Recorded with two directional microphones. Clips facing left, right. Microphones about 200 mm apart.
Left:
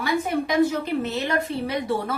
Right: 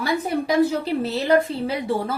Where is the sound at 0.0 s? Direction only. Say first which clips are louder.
Right 1 dB; 35° right (ahead or behind).